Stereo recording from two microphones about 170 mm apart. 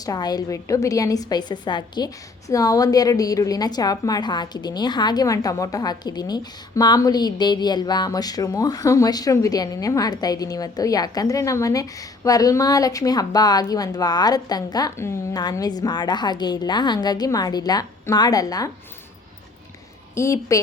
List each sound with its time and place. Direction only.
0.0 s a woman's voice: 20° left (ahead or behind)
20.1 s a woman's voice: 15° left (ahead or behind)